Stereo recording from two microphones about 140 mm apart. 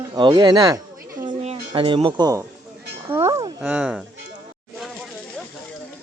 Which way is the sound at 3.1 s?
20° right (ahead or behind).